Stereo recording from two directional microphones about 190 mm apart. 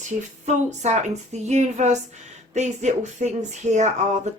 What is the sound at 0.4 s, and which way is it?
Speech, 35° right (ahead or behind).